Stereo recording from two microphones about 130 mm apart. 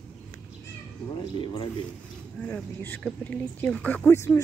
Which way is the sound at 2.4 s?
10° left (ahead or behind).